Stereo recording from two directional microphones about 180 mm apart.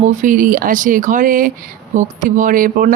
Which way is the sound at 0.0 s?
45° right (ahead or behind).